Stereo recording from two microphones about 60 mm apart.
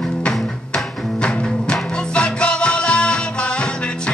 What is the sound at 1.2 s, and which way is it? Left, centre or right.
Music, centre.